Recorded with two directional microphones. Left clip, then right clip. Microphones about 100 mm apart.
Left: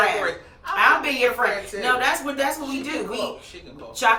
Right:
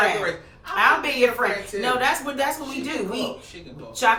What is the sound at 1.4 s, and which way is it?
A man's voice, 15° right (ahead or behind).